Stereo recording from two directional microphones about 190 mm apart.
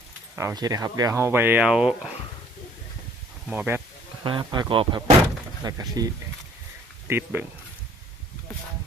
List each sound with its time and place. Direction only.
0.3 s speech: 15° right (ahead or behind)
3.4 s speech: 5° right (ahead or behind)
4.2 s speech: 25° right (ahead or behind)
7.1 s speech: 10° right (ahead or behind)